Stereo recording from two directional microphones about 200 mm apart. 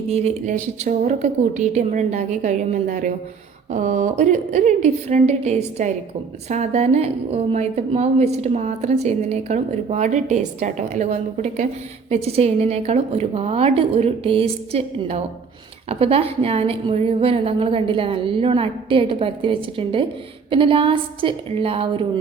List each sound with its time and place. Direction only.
0.1 s a woman's voice: 30° right (ahead or behind)